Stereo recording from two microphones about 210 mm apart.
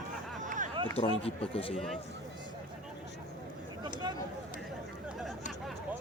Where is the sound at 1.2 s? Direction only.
25° left (ahead or behind).